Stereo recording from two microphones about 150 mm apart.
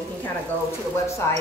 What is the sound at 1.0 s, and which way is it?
Speech, 20° left (ahead or behind).